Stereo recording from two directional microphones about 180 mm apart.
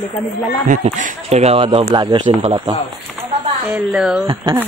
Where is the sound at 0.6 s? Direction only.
45° right (ahead or behind).